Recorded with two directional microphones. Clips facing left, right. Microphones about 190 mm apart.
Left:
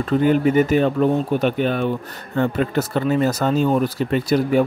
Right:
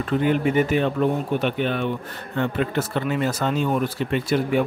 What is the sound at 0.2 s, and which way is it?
Speech, 40° left (ahead or behind).